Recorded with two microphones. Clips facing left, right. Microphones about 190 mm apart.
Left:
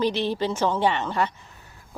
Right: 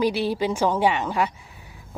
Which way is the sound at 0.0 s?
10° right (ahead or behind).